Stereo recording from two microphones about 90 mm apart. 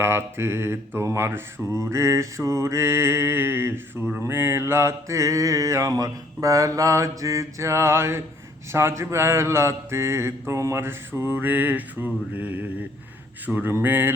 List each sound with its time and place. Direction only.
0.0 s mantra: 30° right (ahead or behind)